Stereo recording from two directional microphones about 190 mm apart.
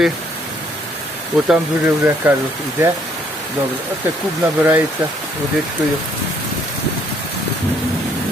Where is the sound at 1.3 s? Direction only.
Centre (ahead or behind).